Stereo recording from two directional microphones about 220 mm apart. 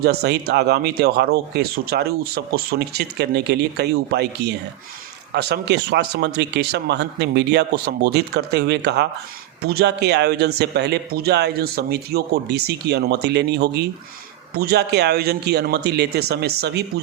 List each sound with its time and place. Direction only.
0.0 s speech: 45° right (ahead or behind)